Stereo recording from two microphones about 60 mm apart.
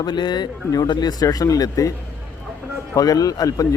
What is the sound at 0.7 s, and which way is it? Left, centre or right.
A man's voice, left.